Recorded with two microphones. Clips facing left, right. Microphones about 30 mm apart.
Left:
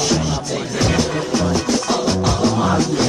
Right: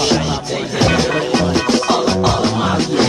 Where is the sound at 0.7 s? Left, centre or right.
Right.